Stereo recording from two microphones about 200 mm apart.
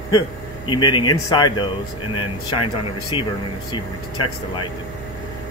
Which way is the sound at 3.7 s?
25° left (ahead or behind).